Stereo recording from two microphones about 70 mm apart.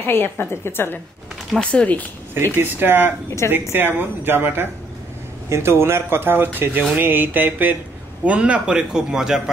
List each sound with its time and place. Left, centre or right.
0.0 s a woman's voice: left
1.6 s speech: centre
2.3 s speech: right
3.3 s a woman's voice: left
3.7 s speech: right
7.0 s a sound: right
8.3 s a man's voice: centre